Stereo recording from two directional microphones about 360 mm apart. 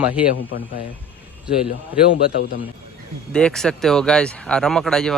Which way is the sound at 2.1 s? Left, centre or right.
Left.